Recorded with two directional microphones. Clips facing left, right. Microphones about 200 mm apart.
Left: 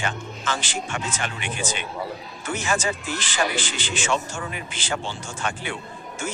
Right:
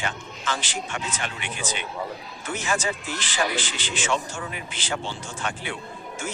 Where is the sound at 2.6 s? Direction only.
45° left (ahead or behind).